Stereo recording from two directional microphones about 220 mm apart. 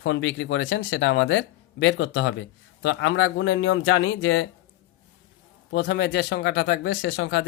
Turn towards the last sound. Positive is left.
turn(degrees=60)  # may be behind; listen again after turning